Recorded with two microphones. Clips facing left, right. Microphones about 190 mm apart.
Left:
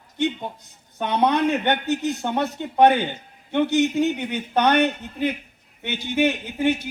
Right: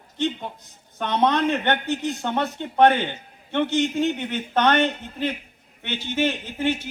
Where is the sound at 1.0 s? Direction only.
10° left (ahead or behind).